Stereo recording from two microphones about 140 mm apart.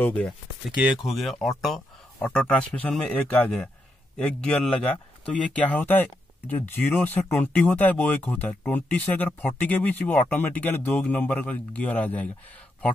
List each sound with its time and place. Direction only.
0.0 s speech: 10° left (ahead or behind)
0.7 s speech: 5° right (ahead or behind)
1.6 s a sound: centre (ahead or behind)
2.2 s speech: 10° left (ahead or behind)